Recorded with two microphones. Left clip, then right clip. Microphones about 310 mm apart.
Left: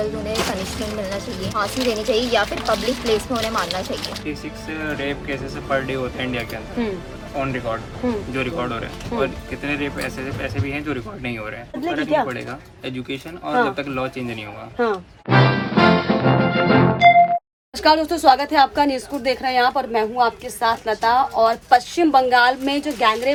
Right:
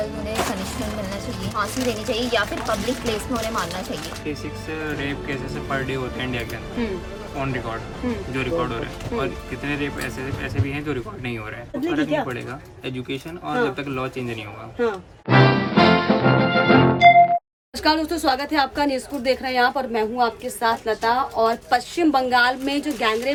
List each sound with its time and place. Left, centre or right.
1.5 s a woman's voice: centre
4.7 s a woman's voice: centre
13.7 s a woman's voice: centre
14.8 s music: centre
17.8 s a woman's voice: centre